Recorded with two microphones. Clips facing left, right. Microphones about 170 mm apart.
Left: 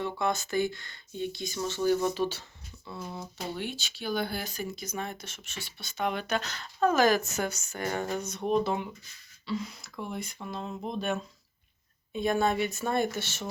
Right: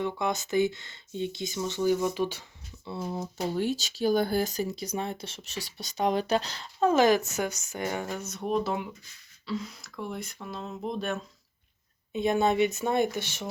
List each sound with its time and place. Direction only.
0.0 s speech: 20° right (ahead or behind)
2.8 s speech: 35° right (ahead or behind); by 8.0 s 15° right (ahead or behind)
8.0 s speech: 5° right (ahead or behind)
12.1 s speech: 20° right (ahead or behind)